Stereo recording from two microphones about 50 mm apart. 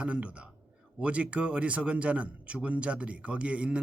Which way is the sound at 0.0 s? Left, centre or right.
Right.